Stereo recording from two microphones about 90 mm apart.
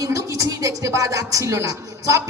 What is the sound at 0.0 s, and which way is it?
A woman's voice, 35° right (ahead or behind).